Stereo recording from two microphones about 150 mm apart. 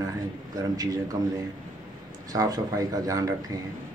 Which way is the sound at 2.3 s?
25° right (ahead or behind).